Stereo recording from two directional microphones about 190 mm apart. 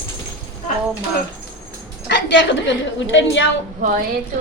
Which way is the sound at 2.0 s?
70° left (ahead or behind).